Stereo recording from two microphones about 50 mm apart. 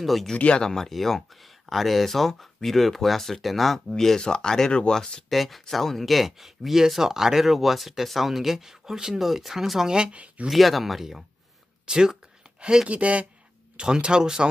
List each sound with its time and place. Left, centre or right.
0.0 s speech: centre
5.3 s speech: centre; by 10.5 s right
10.5 s speech: centre
11.9 s a sound: centre
12.5 s speech: right